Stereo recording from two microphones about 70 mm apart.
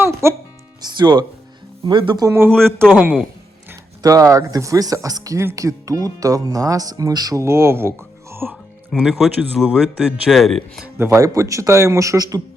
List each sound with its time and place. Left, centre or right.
0.0 s music: right
0.8 s speech: right
2.3 s a man's voice: right
4.0 s speech: right
7.3 s speech: right
8.9 s speech: centre
10.9 s a man's voice: right
11.2 s a man's voice: right